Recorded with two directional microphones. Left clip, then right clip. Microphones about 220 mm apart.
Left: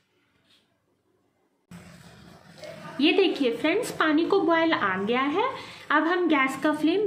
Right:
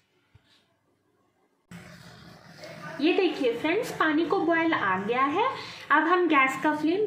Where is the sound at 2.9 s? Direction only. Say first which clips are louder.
Left 3 dB; 45° left (ahead or behind).